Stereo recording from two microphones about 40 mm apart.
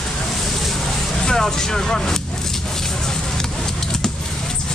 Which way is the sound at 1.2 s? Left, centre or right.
Centre.